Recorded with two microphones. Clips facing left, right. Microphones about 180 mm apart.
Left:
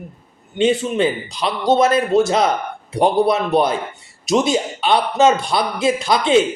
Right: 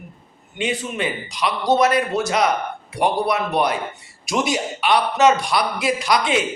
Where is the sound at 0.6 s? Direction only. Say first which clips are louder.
Left 8 dB; 30° left (ahead or behind).